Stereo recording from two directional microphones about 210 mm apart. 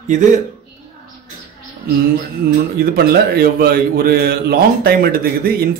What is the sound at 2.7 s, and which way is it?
A man's voice, 45° right (ahead or behind).